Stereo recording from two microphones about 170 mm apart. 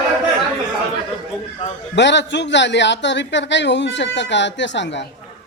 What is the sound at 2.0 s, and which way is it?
A man's voice, 90° left.